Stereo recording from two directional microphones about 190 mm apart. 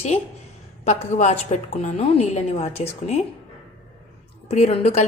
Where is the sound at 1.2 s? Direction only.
35° left (ahead or behind).